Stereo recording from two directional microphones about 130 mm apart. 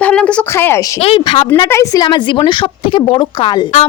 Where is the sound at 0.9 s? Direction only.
50° left (ahead or behind).